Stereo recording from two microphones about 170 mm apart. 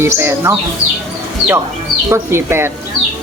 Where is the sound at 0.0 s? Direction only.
15° right (ahead or behind).